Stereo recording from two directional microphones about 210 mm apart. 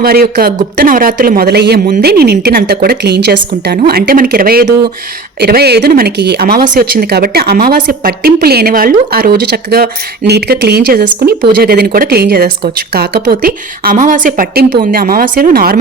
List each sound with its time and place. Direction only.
0.0 s speech: 45° right (ahead or behind)